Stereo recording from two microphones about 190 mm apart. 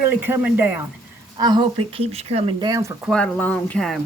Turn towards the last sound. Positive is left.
turn(degrees=5)  # may be behind; listen again after turning